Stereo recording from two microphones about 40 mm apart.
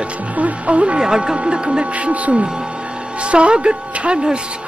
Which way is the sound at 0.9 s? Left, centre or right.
Centre.